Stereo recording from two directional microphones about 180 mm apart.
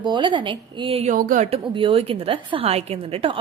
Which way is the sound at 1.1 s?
45° right (ahead or behind).